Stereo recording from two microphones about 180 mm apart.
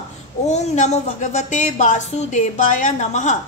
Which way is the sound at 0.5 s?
40° left (ahead or behind).